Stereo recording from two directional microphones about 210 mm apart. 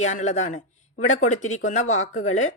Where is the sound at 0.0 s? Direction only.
35° left (ahead or behind).